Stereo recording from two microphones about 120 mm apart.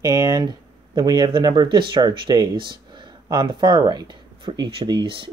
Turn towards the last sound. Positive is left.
turn(degrees=-45)  # may be behind; listen again after turning